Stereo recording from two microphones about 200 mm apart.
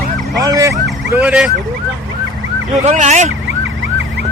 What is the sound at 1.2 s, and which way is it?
Speech, 5° right (ahead or behind).